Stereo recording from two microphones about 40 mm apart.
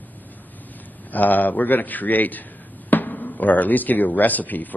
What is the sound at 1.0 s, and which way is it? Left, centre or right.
Speech, left.